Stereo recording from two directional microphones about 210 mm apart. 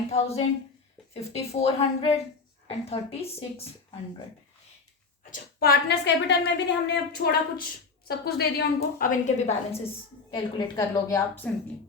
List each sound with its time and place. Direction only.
0.1 s speech: 30° left (ahead or behind)
5.3 s a woman's voice: 45° left (ahead or behind)
10.3 s a woman's voice: 15° left (ahead or behind)